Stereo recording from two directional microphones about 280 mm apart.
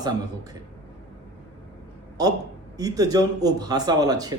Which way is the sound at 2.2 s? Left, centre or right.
Centre.